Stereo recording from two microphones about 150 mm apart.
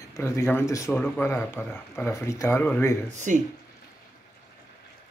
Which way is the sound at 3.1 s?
55° right (ahead or behind).